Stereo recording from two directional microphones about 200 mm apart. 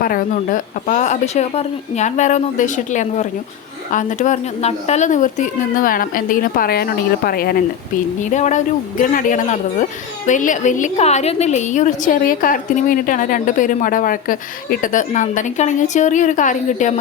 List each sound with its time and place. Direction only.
0.0 s a woman's voice: 45° left (ahead or behind)
8.2 s a woman's voice: 35° left (ahead or behind)